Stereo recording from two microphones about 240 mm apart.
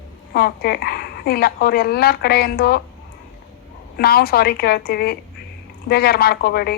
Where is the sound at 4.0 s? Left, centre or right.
Left.